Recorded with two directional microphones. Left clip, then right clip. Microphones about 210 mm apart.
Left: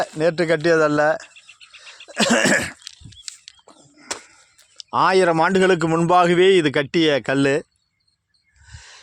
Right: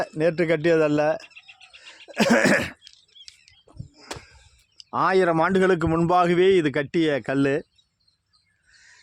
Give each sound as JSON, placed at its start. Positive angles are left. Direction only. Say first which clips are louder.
{"t": 0.0, "sound": "speech", "louder": "left 3 dB", "side_deg": 5}
{"t": 2.0, "sound": "cough", "louder": "left 2 dB", "side_deg": -10}
{"t": 2.8, "sound": "a sound", "louder": "left 8 dB", "side_deg": 40}
{"t": 4.1, "sound": "a sound", "louder": "left 6 dB", "side_deg": 15}
{"t": 4.8, "sound": "a man's voice", "louder": "left 4 dB", "side_deg": 10}
{"t": 8.6, "sound": "owl", "louder": "left 9 dB", "side_deg": 10}